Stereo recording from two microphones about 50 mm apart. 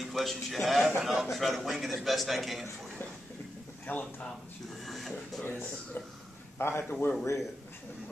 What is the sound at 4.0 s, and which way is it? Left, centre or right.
Speech, left.